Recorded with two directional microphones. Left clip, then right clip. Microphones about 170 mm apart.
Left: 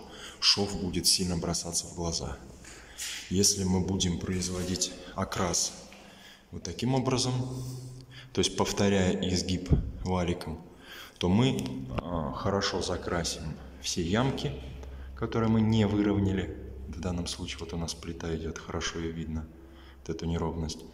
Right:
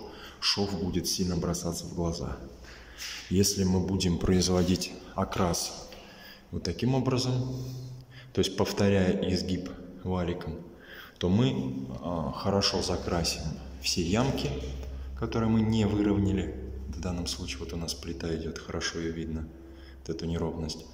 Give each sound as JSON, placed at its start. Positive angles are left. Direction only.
{"t": 0.2, "sound": "speech", "side_deg": 0}
{"t": 3.3, "sound": "speech", "side_deg": 0}
{"t": 4.2, "sound": "speech", "side_deg": -25}
{"t": 4.7, "sound": "speech", "side_deg": -10}
{"t": 12.1, "sound": "speech", "side_deg": -10}